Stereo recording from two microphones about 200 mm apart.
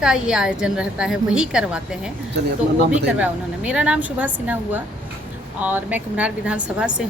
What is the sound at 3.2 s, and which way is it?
A woman's voice, 5° right (ahead or behind).